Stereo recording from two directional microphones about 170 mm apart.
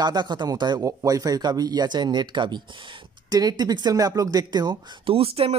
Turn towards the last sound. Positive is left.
turn(degrees=-35)  # may be behind; listen again after turning